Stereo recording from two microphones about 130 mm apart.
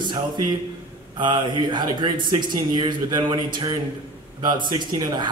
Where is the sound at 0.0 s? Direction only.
35° right (ahead or behind).